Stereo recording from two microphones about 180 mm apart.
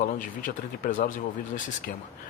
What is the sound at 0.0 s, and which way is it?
Speech, 50° left (ahead or behind).